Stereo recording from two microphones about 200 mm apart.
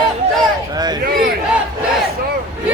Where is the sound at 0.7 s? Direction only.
20° right (ahead or behind).